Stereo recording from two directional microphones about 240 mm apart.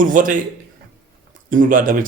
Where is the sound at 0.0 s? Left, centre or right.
Right.